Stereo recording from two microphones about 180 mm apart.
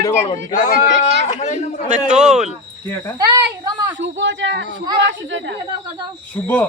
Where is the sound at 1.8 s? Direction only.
45° right (ahead or behind).